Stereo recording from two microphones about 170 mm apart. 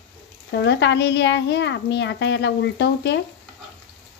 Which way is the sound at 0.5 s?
85° left.